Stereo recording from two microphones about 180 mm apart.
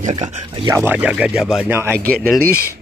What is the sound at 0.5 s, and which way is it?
Speech, 25° right (ahead or behind).